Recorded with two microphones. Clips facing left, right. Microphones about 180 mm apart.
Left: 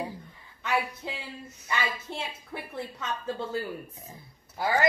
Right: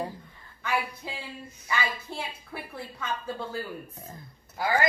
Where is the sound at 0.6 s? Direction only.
20° left (ahead or behind).